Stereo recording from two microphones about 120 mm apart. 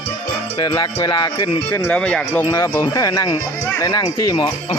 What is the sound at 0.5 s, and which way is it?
Speech, 35° left (ahead or behind).